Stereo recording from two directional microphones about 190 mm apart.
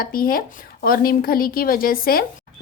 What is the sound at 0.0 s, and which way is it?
A woman's voice, 50° left (ahead or behind).